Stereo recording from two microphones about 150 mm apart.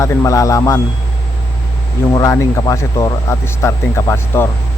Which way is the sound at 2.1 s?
20° left (ahead or behind).